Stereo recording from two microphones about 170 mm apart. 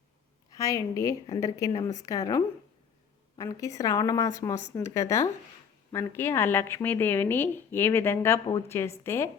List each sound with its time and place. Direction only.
0.5 s a woman's voice: 20° left (ahead or behind)